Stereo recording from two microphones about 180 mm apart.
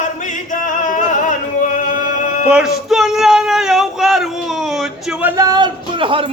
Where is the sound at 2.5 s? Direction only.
Centre (ahead or behind); by 6.3 s 30° right (ahead or behind).